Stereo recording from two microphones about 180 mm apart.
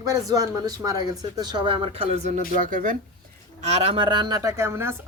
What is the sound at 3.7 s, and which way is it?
Speech, 30° right (ahead or behind).